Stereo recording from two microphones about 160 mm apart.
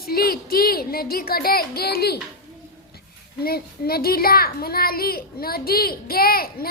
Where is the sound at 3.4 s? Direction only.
75° left (ahead or behind).